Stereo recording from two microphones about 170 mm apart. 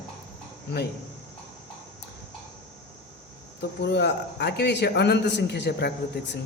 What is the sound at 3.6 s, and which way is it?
Speech, 75° left (ahead or behind).